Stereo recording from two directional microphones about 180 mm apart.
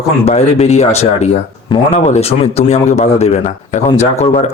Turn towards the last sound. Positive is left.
turn(degrees=35)  # may be behind; listen again after turning